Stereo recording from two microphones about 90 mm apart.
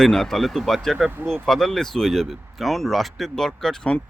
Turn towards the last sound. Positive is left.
turn(degrees=5)  # may be behind; listen again after turning